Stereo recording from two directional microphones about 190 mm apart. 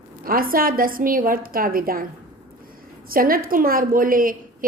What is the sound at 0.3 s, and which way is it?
A woman's voice, 50° right (ahead or behind).